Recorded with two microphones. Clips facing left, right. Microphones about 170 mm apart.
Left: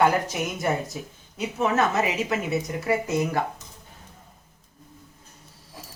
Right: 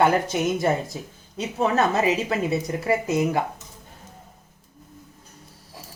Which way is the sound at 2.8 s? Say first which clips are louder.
Right 3 dB; 20° right (ahead or behind).